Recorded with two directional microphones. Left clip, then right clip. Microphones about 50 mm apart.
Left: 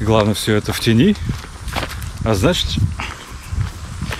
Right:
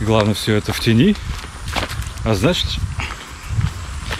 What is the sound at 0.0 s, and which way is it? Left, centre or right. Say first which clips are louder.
Speech: left 1 dB; left.